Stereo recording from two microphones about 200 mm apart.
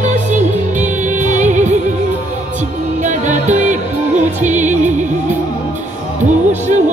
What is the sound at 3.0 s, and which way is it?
Music, 35° right (ahead or behind).